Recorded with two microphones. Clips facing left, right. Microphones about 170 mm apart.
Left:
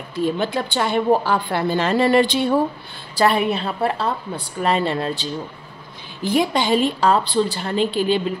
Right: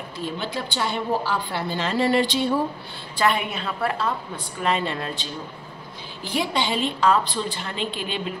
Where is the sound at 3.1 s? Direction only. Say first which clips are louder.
Left 5 dB; 35° left (ahead or behind).